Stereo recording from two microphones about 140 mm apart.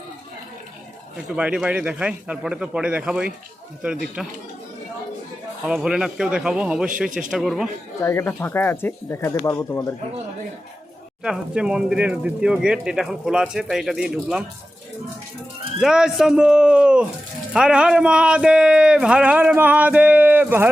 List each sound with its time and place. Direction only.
1.4 s speech: 10° right (ahead or behind)
5.6 s speech: 5° right (ahead or behind)
8.0 s speech: 20° left (ahead or behind)
11.2 s speech: 5° right (ahead or behind)
15.8 s speech: 5° right (ahead or behind)